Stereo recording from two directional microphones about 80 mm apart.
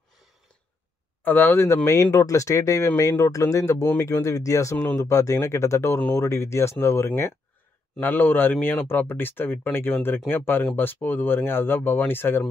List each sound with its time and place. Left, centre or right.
1.2 s speech: left
1.9 s speech: left
8.0 s speech: left